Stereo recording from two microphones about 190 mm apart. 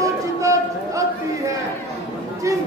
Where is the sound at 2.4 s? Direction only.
15° right (ahead or behind).